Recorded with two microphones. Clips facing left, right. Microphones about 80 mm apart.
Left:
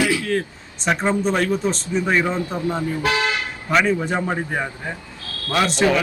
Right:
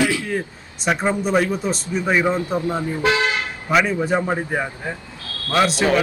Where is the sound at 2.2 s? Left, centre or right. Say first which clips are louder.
Right 2 dB; centre.